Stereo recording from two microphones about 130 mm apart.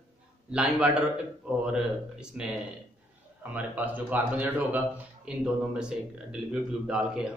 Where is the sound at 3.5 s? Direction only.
15° right (ahead or behind).